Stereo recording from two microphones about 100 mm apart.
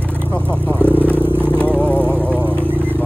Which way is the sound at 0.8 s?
20° right (ahead or behind).